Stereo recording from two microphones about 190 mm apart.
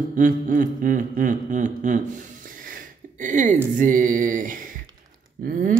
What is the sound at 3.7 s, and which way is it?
Speech, 45° right (ahead or behind).